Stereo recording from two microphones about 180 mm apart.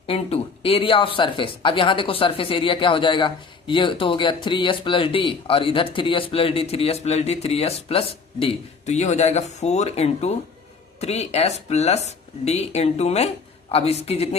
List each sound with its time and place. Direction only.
0.1 s speech: 30° left (ahead or behind)